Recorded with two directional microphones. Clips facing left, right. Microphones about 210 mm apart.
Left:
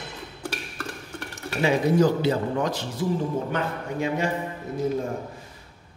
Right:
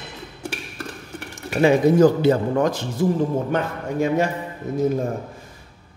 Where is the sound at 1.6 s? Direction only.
50° right (ahead or behind).